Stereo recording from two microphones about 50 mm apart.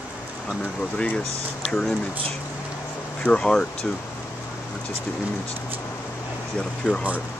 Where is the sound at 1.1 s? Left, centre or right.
Centre.